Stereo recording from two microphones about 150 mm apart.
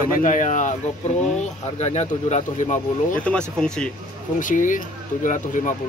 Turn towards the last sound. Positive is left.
turn(degrees=60)  # may be behind; listen again after turning